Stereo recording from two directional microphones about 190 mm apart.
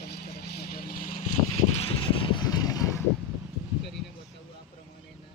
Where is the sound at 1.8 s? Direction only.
25° left (ahead or behind).